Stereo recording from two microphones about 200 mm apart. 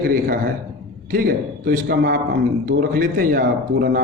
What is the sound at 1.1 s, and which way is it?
A man's voice, 45° right (ahead or behind).